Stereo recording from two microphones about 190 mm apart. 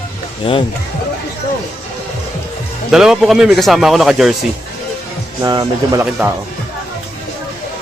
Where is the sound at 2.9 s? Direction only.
Centre (ahead or behind).